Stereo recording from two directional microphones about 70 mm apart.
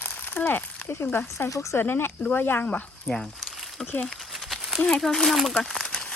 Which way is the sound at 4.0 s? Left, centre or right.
Centre.